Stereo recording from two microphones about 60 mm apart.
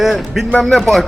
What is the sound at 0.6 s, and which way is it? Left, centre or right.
Speech, centre.